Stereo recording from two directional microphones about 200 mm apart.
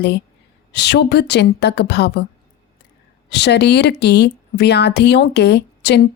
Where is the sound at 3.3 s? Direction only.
55° left (ahead or behind).